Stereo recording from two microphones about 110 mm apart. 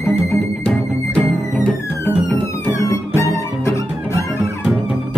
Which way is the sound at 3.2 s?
25° left (ahead or behind).